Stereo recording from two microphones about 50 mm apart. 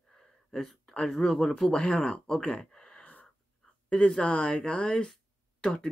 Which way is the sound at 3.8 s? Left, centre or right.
Left.